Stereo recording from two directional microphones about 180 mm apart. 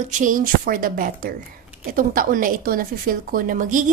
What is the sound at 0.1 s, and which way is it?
A woman's voice, 45° right (ahead or behind).